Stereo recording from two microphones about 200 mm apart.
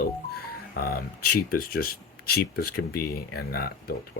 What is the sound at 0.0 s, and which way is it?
Speech, 50° left (ahead or behind).